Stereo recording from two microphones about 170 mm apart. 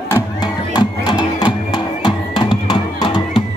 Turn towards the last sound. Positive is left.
turn(degrees=30)  # may be behind; listen again after turning